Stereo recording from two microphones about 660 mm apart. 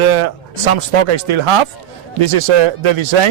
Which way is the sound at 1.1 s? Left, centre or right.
Right.